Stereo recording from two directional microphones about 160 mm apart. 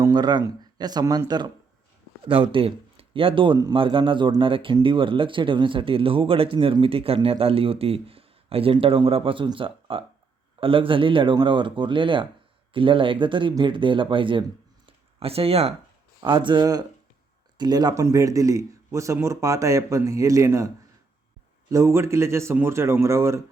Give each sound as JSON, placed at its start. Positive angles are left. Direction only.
{"t": 0.0, "sound": "speech", "side_deg": -25}
{"t": 21.7, "sound": "speech", "side_deg": -20}